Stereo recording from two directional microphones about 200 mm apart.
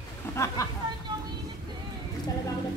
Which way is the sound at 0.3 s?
15° left (ahead or behind).